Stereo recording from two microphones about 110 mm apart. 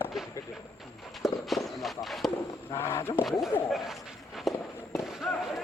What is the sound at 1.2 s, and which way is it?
Walk, centre (ahead or behind).